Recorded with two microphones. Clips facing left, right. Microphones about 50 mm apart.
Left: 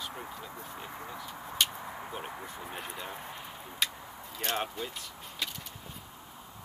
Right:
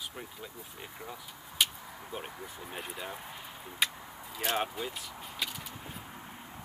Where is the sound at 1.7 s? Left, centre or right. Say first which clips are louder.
Left 5 dB; left.